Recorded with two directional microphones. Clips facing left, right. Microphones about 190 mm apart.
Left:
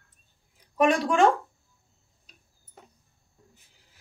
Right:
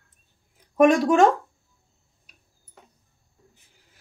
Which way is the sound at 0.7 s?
45° right (ahead or behind).